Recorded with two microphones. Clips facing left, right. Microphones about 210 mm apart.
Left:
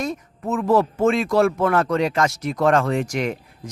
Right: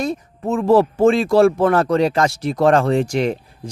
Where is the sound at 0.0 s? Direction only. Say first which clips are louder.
Right 4 dB; 30° right (ahead or behind).